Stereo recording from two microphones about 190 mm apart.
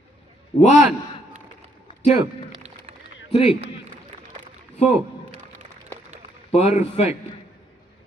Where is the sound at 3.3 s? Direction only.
30° left (ahead or behind).